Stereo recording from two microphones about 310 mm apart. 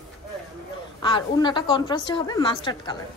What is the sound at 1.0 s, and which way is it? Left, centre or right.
A woman's voice, centre.